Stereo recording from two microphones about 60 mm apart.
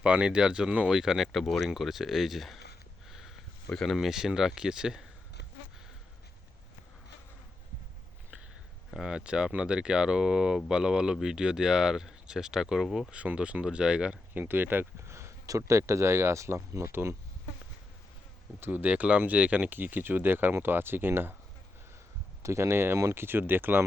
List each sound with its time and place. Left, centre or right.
0.0 s speech: centre
0.9 s speech: centre
3.1 s a sound: centre
3.7 s speech: centre
3.9 s speech: centre
8.9 s speech: centre
13.1 s speech: right
14.3 s speech: right
15.0 s a sound: right
15.4 s speech: right
18.6 s speech: right
22.4 s speech: right